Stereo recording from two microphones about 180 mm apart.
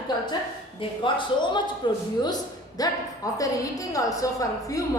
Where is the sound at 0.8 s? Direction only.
25° left (ahead or behind).